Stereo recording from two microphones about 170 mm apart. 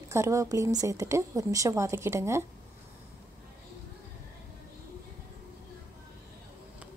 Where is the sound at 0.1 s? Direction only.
15° right (ahead or behind).